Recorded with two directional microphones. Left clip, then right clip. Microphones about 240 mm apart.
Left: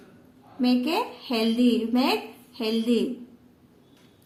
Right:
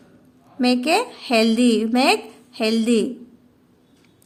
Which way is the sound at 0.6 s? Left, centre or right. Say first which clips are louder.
Right 6 dB; right.